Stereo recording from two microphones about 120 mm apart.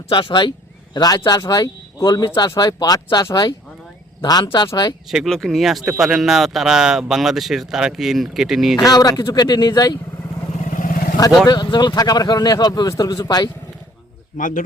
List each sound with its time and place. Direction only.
0.1 s speech: 45° left (ahead or behind)
5.0 s speech: centre (ahead or behind)
8.7 s speech: 30° left (ahead or behind)
10.6 s vehicle: 90° left
11.4 s speech: 40° left (ahead or behind)
14.3 s speech: 90° left